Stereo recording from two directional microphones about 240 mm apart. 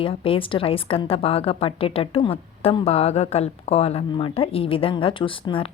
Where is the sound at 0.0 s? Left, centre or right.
Left.